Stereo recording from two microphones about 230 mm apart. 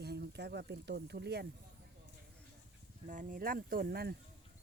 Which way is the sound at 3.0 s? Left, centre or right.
Right.